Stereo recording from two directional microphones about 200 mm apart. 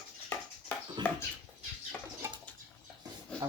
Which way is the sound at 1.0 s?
20° right (ahead or behind).